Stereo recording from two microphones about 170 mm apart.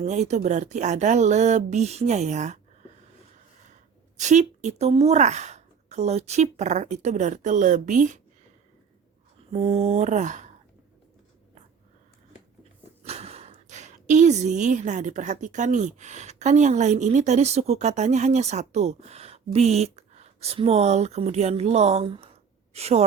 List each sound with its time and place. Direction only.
0.0 s speech: 40° right (ahead or behind)
4.2 s speech: 45° right (ahead or behind)
9.5 s speech: 35° right (ahead or behind)
13.1 s a woman's voice: 40° right (ahead or behind)